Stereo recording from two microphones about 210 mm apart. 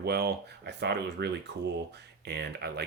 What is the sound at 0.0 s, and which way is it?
Speech, 50° right (ahead or behind).